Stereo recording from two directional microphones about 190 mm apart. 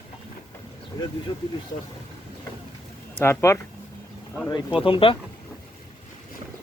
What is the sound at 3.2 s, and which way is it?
Speech, 15° left (ahead or behind).